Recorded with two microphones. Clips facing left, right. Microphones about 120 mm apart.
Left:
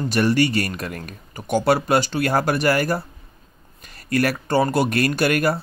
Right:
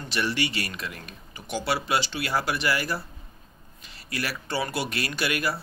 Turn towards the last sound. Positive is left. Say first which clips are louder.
# left 9 dB
turn(degrees=50)  # may be behind; listen again after turning